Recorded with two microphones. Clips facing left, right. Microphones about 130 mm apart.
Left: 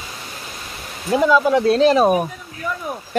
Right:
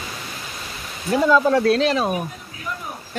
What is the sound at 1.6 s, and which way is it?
Speech, 35° left (ahead or behind).